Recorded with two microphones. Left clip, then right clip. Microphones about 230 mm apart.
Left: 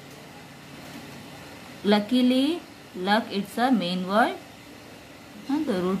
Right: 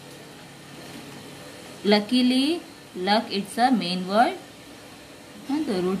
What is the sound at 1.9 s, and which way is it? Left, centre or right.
Speech, centre.